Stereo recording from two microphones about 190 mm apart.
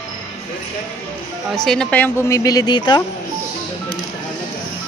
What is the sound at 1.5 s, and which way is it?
Speech, centre (ahead or behind).